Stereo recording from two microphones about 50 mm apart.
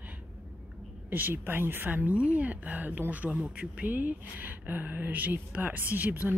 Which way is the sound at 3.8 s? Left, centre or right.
Right.